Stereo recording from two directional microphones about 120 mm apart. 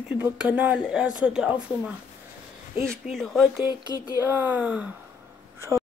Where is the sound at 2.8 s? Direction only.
5° left (ahead or behind).